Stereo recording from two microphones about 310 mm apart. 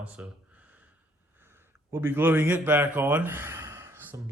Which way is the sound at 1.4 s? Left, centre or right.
Centre.